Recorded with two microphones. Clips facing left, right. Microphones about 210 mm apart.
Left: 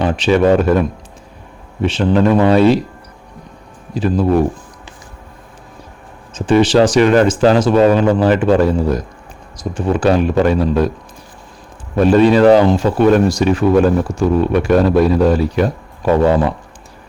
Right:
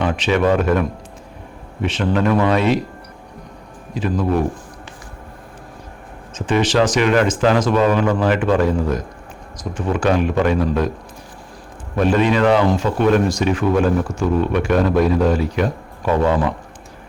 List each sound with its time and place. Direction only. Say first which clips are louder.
0.0 s speech: left 4 dB; 35° left (ahead or behind)
3.9 s speech: left 5 dB; 35° left (ahead or behind)
6.3 s speech: left 6 dB; 30° left (ahead or behind)
11.9 s speech: left 6 dB; 35° left (ahead or behind)